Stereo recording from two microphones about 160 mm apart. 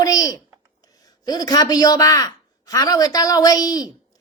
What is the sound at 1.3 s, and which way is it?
Speech, 25° left (ahead or behind).